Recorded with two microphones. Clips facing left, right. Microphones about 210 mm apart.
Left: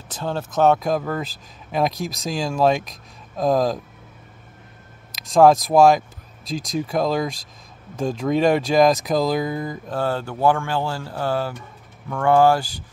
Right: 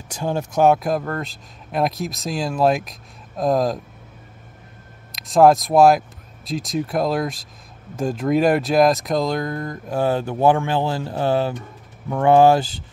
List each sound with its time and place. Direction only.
0.1 s speech: 15° right (ahead or behind)
5.1 s speech: centre (ahead or behind)
9.8 s speech: 15° right (ahead or behind)